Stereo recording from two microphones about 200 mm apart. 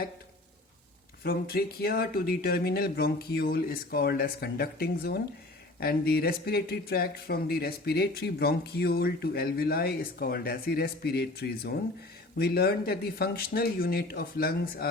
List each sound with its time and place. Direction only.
1.2 s speech: 50° left (ahead or behind)